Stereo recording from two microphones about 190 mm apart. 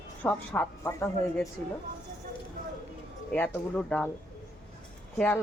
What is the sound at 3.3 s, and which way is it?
Speech, 10° left (ahead or behind).